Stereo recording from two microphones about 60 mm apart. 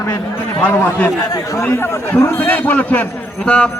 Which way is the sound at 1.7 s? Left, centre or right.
Left.